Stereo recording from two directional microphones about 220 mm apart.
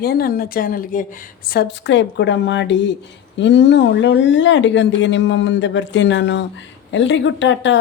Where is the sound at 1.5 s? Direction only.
50° left (ahead or behind).